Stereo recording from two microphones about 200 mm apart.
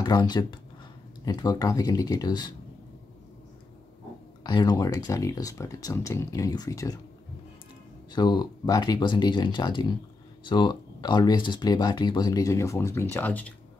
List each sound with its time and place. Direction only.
0.0 s speech: 20° left (ahead or behind)
4.4 s speech: 20° left (ahead or behind)
8.1 s speech: 20° left (ahead or behind)